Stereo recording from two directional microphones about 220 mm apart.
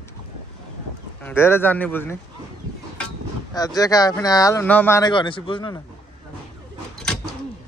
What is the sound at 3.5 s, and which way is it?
Speech, 15° left (ahead or behind).